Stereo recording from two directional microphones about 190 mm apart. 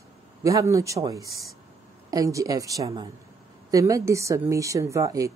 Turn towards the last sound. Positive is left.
turn(degrees=-15)  # may be behind; listen again after turning